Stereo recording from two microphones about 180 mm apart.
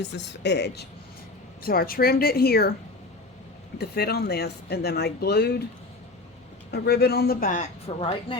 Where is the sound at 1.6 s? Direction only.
55° left (ahead or behind).